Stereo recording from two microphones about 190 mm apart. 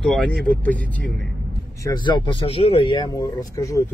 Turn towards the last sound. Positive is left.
turn(degrees=15)  # may be behind; listen again after turning